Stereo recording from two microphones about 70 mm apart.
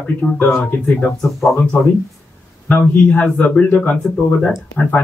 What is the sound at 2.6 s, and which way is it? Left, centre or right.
Speech, centre.